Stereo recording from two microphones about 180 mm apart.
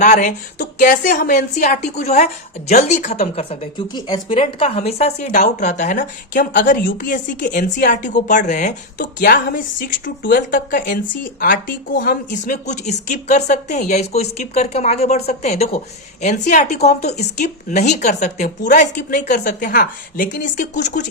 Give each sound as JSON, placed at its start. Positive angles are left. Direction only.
{"t": 0.0, "sound": "a woman's voice", "side_deg": 45}